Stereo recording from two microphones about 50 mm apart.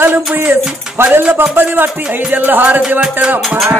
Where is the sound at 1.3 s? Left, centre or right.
Right.